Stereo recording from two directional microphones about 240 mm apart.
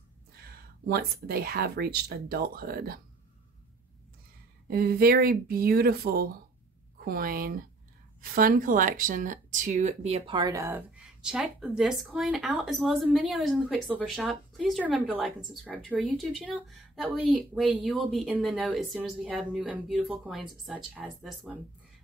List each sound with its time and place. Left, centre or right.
0.8 s speech: right
4.6 s a woman's voice: right; by 21.5 s centre